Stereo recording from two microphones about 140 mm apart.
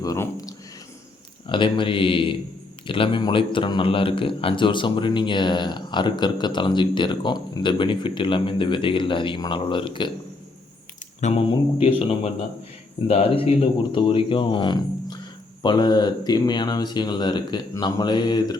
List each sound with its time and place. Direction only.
0.0 s speech: 25° left (ahead or behind)
1.5 s speech: 35° left (ahead or behind)
11.2 s speech: 50° left (ahead or behind); by 18.5 s 30° left (ahead or behind)